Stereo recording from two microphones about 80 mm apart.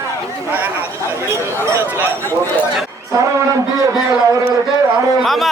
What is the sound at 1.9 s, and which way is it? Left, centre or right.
Speech, right.